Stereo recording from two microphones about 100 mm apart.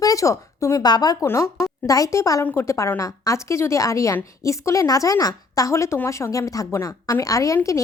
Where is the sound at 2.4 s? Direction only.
20° left (ahead or behind).